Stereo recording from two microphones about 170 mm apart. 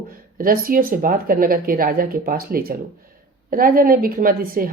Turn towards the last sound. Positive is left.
turn(degrees=-55)  # may be behind; listen again after turning